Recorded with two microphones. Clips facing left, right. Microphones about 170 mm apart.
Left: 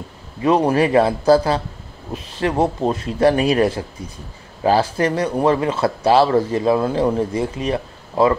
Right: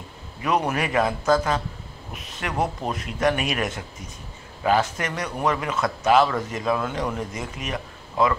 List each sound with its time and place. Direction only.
0.4 s speech: 30° left (ahead or behind)